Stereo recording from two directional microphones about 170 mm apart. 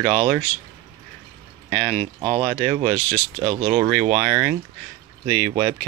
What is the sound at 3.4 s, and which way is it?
Speech, 35° right (ahead or behind).